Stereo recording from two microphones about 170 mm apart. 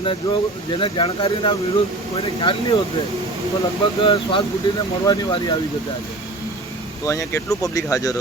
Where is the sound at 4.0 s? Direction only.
30° left (ahead or behind).